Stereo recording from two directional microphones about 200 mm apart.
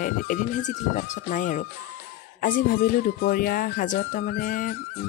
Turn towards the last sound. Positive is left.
turn(degrees=45)  # may be behind; listen again after turning